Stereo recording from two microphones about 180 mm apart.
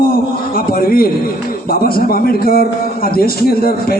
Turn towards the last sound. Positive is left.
turn(degrees=55)  # may be behind; listen again after turning